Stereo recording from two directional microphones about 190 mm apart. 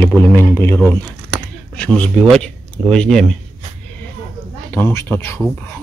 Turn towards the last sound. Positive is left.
turn(degrees=10)  # may be behind; listen again after turning